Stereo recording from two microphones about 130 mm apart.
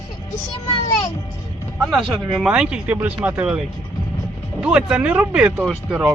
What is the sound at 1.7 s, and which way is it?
Speech, centre (ahead or behind).